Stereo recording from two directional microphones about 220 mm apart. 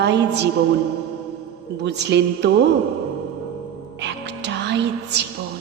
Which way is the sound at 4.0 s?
50° right (ahead or behind).